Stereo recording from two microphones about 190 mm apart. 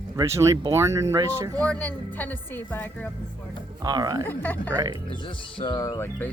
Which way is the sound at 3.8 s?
20° right (ahead or behind).